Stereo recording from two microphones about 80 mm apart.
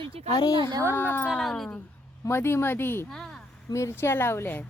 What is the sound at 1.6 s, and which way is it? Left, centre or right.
Speech, centre.